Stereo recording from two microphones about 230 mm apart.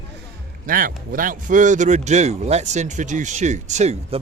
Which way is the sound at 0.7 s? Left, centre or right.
Right.